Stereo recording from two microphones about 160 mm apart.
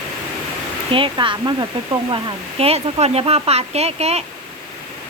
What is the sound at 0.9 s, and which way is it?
Speech, 30° right (ahead or behind).